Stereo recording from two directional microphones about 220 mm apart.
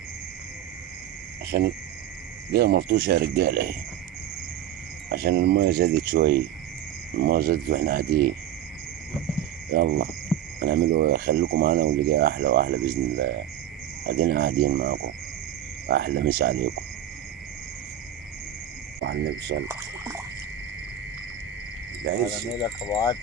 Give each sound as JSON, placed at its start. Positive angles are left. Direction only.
{"t": 1.5, "sound": "speech", "side_deg": -45}
{"t": 5.0, "sound": "speech", "side_deg": -45}
{"t": 9.7, "sound": "speech", "side_deg": -50}
{"t": 19.0, "sound": "speech", "side_deg": -50}
{"t": 19.6, "sound": "speech", "side_deg": -10}
{"t": 22.6, "sound": "speech", "side_deg": 20}